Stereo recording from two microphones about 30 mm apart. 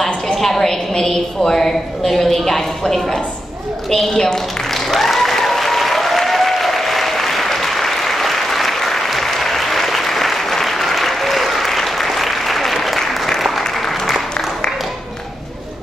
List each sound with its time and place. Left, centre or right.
0.4 s a woman's voice: centre
3.9 s a woman's voice: centre
4.9 s applause: centre